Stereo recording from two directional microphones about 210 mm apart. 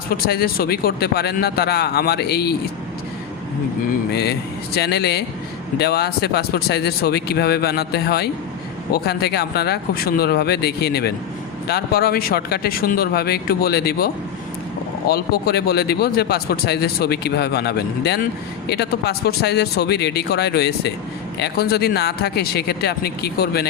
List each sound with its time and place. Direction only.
0.1 s speech: 45° left (ahead or behind)
4.1 s speech: 50° left (ahead or behind)